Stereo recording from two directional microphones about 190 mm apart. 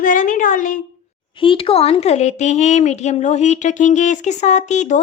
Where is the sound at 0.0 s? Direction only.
45° left (ahead or behind).